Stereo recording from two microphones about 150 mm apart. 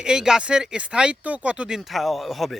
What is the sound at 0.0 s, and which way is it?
Speech, 5° right (ahead or behind).